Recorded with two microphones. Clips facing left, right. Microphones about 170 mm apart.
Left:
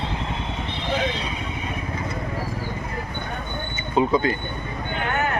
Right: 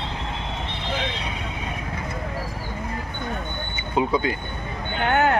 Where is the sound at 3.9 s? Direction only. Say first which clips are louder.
Left 2 dB; 10° right (ahead or behind).